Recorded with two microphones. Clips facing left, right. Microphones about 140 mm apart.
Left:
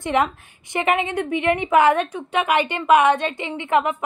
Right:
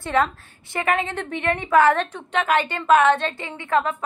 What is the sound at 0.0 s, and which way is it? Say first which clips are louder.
A woman's voice: left 1 dB; 20° left (ahead or behind).